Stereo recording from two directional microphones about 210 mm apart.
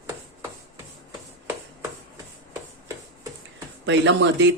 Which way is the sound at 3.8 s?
60° right (ahead or behind).